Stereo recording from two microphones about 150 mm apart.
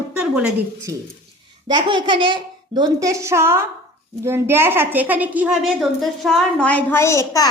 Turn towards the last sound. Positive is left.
turn(degrees=20)  # may be behind; listen again after turning